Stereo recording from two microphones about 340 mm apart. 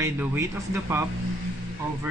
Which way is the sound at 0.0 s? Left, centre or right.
Centre.